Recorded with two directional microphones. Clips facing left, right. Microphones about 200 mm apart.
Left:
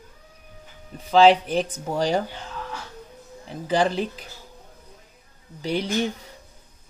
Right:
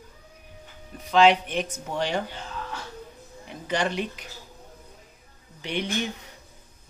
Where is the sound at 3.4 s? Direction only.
35° left (ahead or behind).